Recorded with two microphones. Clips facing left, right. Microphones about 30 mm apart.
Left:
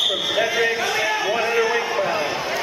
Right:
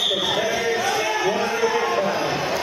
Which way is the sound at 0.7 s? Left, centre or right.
Left.